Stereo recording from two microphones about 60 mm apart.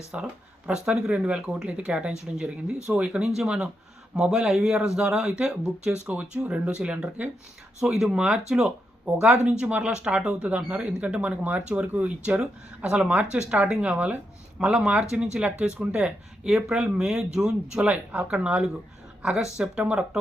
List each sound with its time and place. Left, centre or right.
0.1 s speech: centre
7.8 s speech: centre
17.8 s speech: right
19.8 s speech: right